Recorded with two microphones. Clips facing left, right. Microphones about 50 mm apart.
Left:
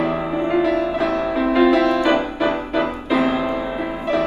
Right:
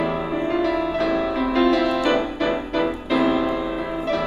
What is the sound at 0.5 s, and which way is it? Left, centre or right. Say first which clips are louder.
Music: left 4 dB; centre.